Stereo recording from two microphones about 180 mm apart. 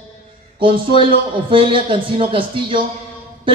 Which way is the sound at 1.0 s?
30° right (ahead or behind).